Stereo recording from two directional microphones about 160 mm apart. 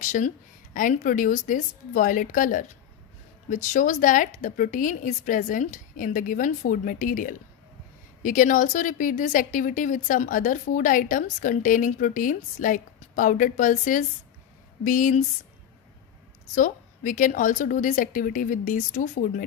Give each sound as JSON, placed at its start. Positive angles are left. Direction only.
{"t": 0.0, "sound": "speech", "side_deg": 55}
{"t": 16.5, "sound": "speech", "side_deg": 50}